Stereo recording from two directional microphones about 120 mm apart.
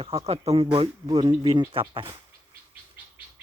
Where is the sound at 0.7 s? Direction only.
40° right (ahead or behind).